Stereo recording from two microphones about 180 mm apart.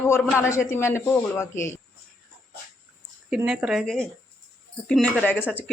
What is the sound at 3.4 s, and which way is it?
Speech, 5° right (ahead or behind).